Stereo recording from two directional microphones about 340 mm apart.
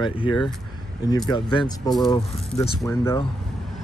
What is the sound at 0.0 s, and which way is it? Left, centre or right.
Speech, centre.